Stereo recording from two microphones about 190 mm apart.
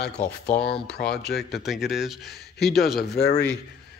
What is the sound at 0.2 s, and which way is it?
Speech, 10° left (ahead or behind).